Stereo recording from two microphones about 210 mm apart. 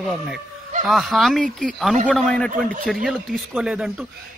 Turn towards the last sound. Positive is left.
turn(degrees=0)  # may be behind; listen again after turning